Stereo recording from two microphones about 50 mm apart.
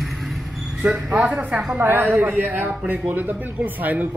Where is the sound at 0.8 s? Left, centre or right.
Right.